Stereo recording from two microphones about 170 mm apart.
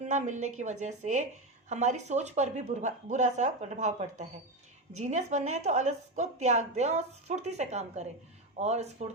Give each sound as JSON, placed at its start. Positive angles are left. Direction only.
{"t": 0.0, "sound": "a woman's voice", "side_deg": -45}